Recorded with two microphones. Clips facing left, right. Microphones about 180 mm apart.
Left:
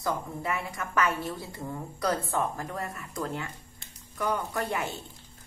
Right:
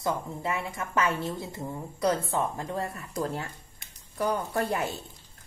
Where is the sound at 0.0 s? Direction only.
25° right (ahead or behind).